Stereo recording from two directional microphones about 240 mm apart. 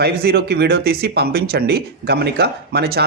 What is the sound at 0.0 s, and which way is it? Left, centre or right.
Speech, right.